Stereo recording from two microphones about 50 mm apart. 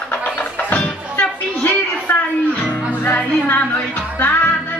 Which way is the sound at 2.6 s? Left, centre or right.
Left.